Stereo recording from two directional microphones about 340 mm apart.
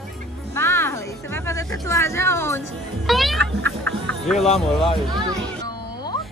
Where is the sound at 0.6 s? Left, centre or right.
Centre.